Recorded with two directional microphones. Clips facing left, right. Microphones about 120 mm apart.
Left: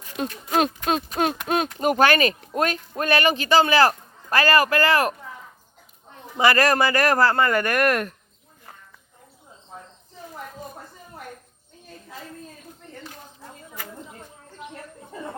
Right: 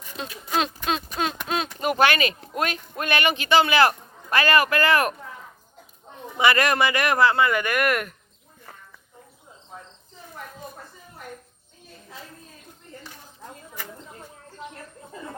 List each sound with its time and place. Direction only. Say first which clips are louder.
0.2 s speech: left 4 dB; 50° left (ahead or behind); by 5.1 s 30° left (ahead or behind)
6.3 s a man's voice: left 2 dB; 35° left (ahead or behind)